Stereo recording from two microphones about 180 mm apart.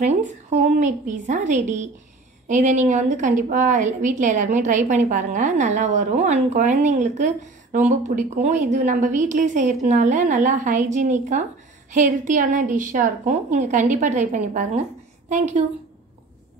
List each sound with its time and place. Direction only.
0.0 s a woman's voice: 40° right (ahead or behind)